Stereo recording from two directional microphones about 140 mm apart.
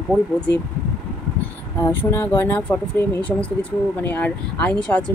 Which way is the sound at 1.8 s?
15° left (ahead or behind).